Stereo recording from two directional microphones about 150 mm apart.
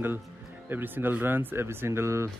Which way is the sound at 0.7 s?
15° right (ahead or behind).